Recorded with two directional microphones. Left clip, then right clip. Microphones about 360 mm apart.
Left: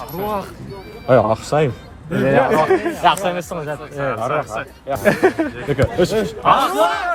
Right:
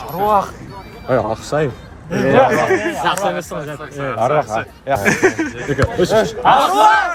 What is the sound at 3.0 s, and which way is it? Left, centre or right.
A man's voice, centre.